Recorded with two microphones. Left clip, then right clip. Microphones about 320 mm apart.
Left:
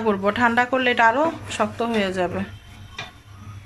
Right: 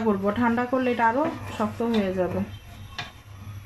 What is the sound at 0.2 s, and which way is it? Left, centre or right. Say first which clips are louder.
Speech: left 6 dB; left.